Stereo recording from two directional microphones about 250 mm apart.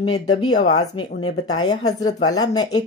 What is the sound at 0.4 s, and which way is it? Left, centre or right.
Speech, centre.